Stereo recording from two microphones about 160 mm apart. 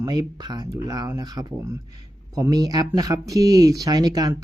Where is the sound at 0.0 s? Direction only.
25° right (ahead or behind).